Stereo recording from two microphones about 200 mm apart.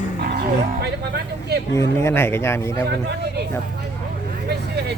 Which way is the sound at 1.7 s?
15° left (ahead or behind).